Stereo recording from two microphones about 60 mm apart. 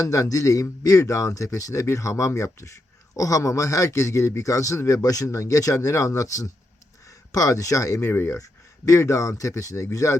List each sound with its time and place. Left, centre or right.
0.0 s speech: left
3.2 s speech: left
8.0 s speech: left
8.4 s speech: left